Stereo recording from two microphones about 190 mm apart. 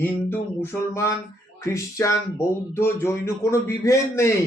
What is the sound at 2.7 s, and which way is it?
A man's voice, 15° left (ahead or behind).